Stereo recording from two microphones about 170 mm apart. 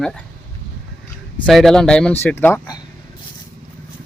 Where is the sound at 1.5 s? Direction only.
Centre (ahead or behind); by 2.8 s 20° left (ahead or behind).